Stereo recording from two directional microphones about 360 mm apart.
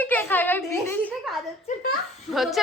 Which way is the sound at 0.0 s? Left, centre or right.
Centre.